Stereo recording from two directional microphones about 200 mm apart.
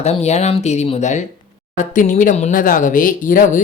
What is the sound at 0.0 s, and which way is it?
Speech, 30° left (ahead or behind).